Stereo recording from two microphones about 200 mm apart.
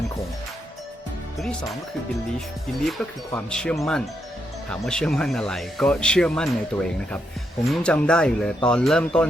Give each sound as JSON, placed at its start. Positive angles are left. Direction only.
{"t": 1.4, "sound": "speech", "side_deg": 0}
{"t": 2.8, "sound": "speech", "side_deg": 5}
{"t": 7.7, "sound": "speech", "side_deg": 5}